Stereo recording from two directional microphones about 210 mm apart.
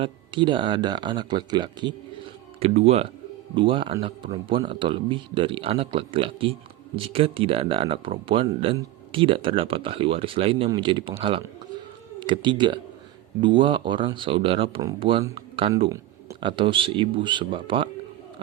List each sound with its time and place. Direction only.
0.0 s speech: 25° right (ahead or behind)